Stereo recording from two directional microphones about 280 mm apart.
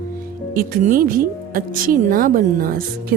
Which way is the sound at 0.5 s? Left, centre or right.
Right.